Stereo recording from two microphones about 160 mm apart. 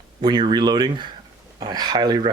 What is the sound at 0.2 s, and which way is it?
Speech, 25° right (ahead or behind).